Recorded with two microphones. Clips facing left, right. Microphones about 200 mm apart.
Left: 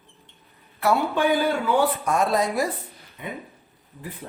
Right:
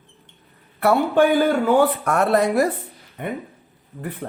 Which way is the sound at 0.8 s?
60° right (ahead or behind).